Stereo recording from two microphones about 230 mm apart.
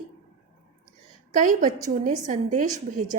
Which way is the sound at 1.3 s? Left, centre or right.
Right.